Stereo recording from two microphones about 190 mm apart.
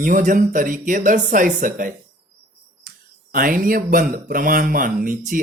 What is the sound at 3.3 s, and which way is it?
A man's voice, 45° right (ahead or behind).